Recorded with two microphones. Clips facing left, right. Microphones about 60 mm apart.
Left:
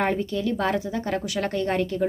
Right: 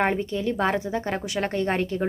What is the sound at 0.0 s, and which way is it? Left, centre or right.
Speech, right.